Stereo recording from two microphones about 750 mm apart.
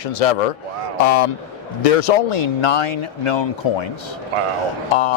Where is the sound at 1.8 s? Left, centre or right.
Left.